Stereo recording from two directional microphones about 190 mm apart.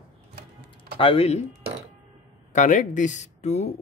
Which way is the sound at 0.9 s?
30° left (ahead or behind).